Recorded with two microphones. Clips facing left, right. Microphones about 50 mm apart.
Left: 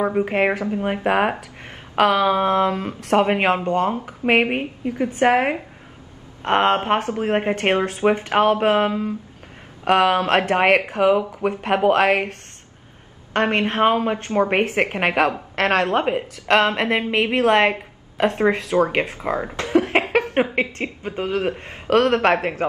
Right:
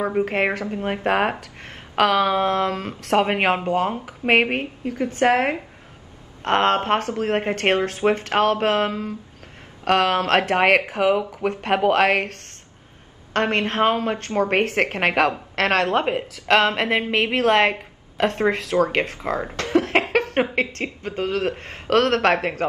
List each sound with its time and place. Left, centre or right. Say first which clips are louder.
0.0 s speech: left 2 dB; centre
6.4 s speech: left 1 dB; centre
13.3 s a woman's voice: left 2 dB; centre